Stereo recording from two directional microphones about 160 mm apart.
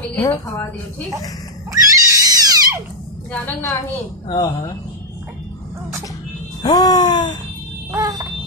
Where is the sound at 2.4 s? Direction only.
20° right (ahead or behind).